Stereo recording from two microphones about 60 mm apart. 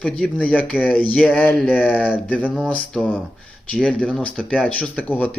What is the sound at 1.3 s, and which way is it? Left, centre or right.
Speech, centre.